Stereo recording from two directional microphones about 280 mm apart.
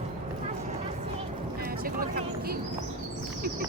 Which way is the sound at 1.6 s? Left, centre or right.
Right.